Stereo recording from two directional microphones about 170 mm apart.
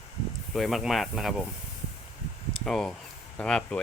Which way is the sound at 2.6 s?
Centre (ahead or behind).